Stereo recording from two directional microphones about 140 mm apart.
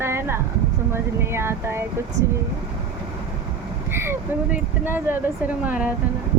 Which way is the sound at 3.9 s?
15° right (ahead or behind).